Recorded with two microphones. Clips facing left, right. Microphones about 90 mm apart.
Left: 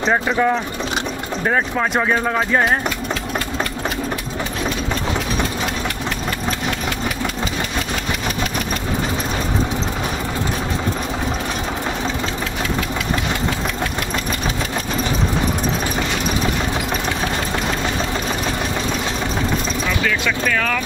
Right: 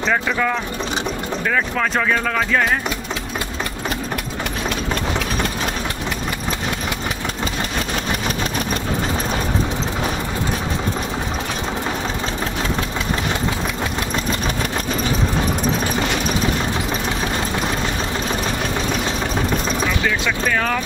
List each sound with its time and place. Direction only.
0.0 s speech: 25° left (ahead or behind)
20.4 s vehicle: 20° right (ahead or behind)